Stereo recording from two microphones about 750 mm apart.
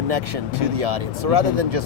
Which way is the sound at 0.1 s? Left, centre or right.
Right.